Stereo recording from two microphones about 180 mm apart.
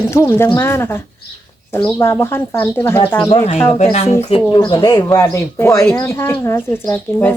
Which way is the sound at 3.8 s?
35° left (ahead or behind).